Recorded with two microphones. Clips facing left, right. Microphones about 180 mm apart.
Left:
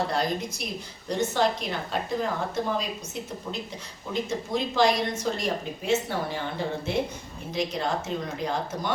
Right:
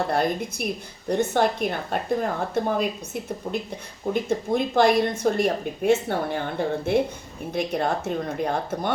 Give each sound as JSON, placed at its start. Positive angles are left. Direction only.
{"t": 0.1, "sound": "a woman's voice", "side_deg": -55}
{"t": 4.1, "sound": "a woman's voice", "side_deg": -55}